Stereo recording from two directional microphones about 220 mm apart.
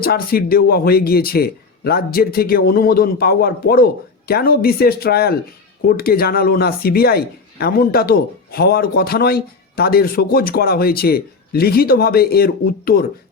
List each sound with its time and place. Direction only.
0.0 s speech: 45° left (ahead or behind)